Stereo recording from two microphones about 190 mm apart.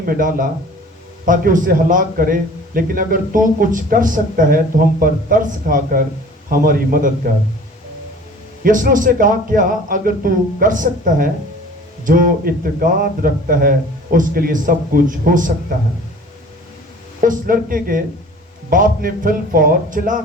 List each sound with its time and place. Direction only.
0.0 s a man's voice: 50° right (ahead or behind)
8.6 s a man's voice: 45° right (ahead or behind)
17.2 s a man's voice: 45° right (ahead or behind)